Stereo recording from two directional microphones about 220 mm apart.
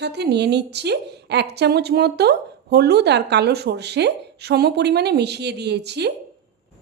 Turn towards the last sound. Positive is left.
turn(degrees=-50)  # may be behind; listen again after turning